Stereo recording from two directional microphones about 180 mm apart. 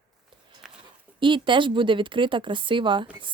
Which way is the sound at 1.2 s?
25° right (ahead or behind).